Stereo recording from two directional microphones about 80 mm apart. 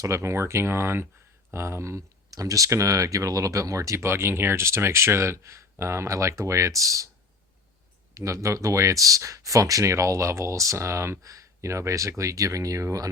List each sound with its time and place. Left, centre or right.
0.0 s speech: right
8.1 s speech: right